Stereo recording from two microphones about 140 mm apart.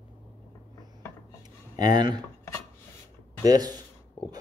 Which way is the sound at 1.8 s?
30° right (ahead or behind).